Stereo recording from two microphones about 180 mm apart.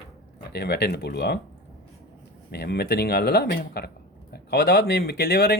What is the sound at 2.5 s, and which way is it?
Speech, 65° left (ahead or behind).